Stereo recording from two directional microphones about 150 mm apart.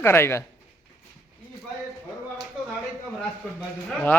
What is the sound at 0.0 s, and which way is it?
Speech, 15° left (ahead or behind).